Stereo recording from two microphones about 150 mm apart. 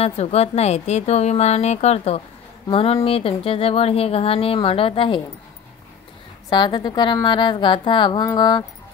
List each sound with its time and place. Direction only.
0.0 s a woman's voice: 45° left (ahead or behind)
6.5 s speech: 30° left (ahead or behind)